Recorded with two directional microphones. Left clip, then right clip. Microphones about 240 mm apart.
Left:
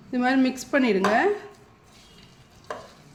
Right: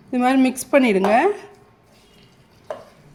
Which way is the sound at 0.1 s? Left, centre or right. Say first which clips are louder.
Right 5 dB; right.